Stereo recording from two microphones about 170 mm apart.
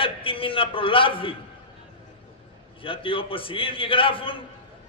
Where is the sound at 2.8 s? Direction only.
30° left (ahead or behind).